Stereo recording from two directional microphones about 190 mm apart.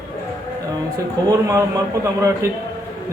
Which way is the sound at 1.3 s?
15° right (ahead or behind).